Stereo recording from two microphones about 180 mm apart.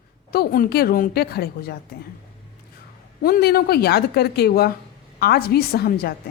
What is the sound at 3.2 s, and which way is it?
Speech, 55° left (ahead or behind).